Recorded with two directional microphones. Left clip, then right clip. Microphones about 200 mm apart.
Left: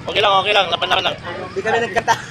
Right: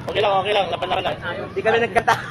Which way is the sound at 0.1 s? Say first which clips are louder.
Left 4 dB; centre (ahead or behind).